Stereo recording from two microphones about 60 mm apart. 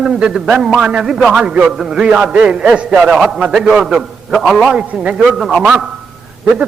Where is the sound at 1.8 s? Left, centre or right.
Centre.